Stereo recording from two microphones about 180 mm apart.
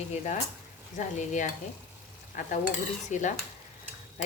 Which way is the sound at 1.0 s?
45° left (ahead or behind).